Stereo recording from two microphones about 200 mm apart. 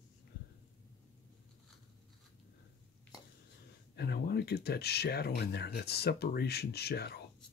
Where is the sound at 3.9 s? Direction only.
55° left (ahead or behind).